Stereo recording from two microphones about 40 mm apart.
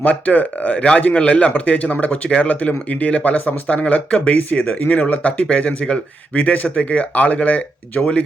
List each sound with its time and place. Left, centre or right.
0.0 s speech: left
4.4 s speech: left
6.3 s speech: left